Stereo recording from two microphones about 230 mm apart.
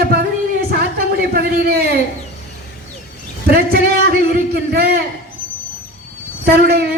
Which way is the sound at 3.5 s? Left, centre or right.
Right.